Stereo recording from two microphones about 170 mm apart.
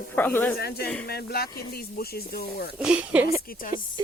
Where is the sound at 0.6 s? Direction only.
70° left (ahead or behind).